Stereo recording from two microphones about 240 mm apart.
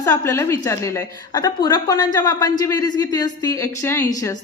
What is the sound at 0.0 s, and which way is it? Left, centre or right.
A woman's voice, centre.